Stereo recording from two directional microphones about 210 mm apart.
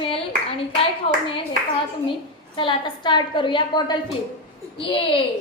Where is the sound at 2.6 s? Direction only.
20° left (ahead or behind).